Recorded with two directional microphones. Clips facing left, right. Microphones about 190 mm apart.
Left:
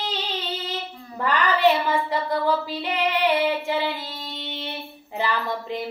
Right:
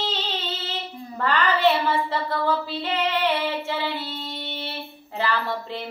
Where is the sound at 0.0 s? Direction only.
15° left (ahead or behind).